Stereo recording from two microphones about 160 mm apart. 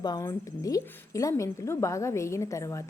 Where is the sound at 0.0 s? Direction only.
25° left (ahead or behind).